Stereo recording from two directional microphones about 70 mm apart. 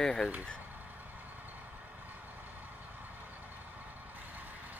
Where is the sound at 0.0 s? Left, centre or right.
Centre.